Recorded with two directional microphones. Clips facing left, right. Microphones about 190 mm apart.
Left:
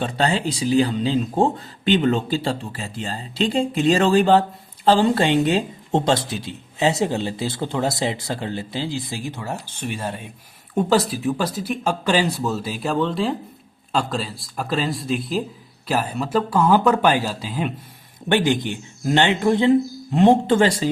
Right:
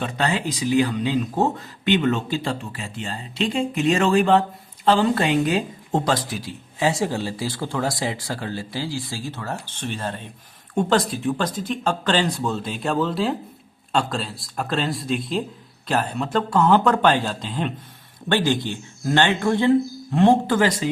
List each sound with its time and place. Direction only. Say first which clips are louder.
0.0 s speech: left 2 dB; 30° left (ahead or behind)